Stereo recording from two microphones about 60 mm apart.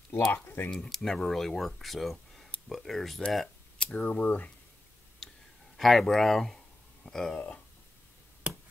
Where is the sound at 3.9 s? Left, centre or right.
Left.